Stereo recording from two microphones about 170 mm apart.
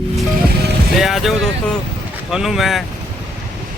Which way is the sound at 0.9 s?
Centre (ahead or behind).